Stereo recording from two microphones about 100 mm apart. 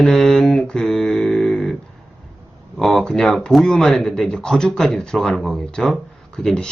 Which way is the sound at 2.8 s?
5° left (ahead or behind).